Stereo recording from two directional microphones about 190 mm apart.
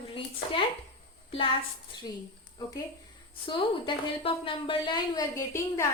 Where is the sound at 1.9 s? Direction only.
25° left (ahead or behind).